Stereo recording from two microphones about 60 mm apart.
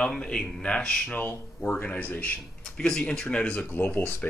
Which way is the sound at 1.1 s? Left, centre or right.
Left.